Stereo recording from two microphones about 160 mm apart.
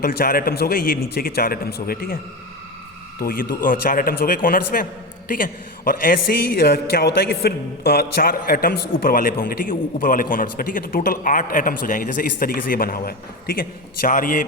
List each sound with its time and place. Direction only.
0.0 s a man's voice: 65° left (ahead or behind)
3.2 s a man's voice: 65° left (ahead or behind)